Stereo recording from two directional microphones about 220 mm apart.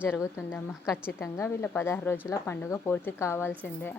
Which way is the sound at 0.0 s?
10° left (ahead or behind).